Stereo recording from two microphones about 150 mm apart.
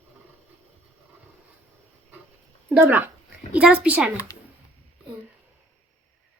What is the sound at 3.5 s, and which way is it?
Speech, 10° right (ahead or behind).